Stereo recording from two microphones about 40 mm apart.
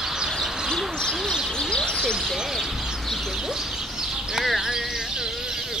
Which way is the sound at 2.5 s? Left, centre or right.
Centre.